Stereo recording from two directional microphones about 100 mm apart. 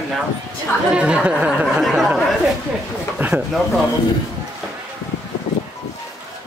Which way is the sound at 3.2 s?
15° right (ahead or behind).